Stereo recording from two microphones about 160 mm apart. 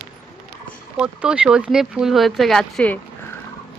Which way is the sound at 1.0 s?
5° right (ahead or behind).